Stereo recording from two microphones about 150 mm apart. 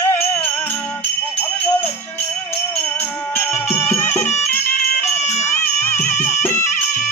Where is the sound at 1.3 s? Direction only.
15° left (ahead or behind).